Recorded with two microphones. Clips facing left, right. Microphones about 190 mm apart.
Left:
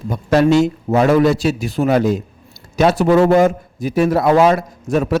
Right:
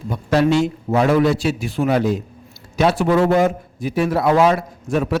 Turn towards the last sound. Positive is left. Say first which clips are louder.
# left 3 dB
turn(degrees=40)  # may be behind; listen again after turning